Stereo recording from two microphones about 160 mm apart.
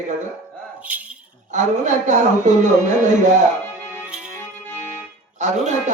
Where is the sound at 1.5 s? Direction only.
50° right (ahead or behind).